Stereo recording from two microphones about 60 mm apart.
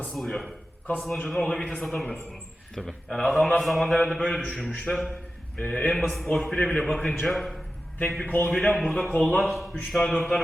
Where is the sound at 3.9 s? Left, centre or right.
Centre.